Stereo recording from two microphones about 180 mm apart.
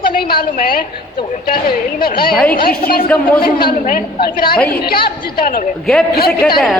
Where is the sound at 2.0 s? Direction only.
60° left (ahead or behind).